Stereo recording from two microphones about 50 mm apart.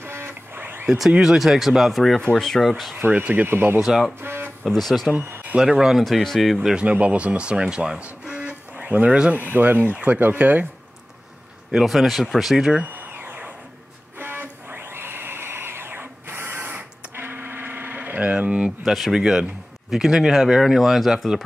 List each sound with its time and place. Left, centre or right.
0.0 s printer: right
0.8 s speech: centre
3.0 s speech: right
4.2 s a sound: right
4.6 s speech: centre
5.6 s speech: centre
6.0 s speech: centre
6.7 s speech: right
9.4 s speech: right
11.7 s speech: centre
13.0 s a sound: right
18.1 s a sound: right
18.9 s speech: centre